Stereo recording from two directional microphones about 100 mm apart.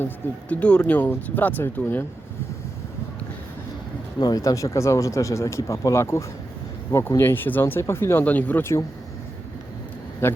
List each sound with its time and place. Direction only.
0.0 s speech: 15° left (ahead or behind)
4.2 s speech: 40° left (ahead or behind)
8.2 s speech: 15° left (ahead or behind)
10.2 s speech: 20° left (ahead or behind)